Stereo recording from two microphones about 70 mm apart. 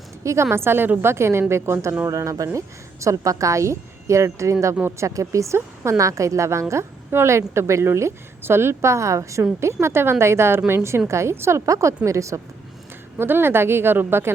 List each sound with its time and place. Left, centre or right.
0.2 s a woman's voice: right
0.5 s a woman's voice: right
11.6 s speech: right
13.1 s a woman's voice: right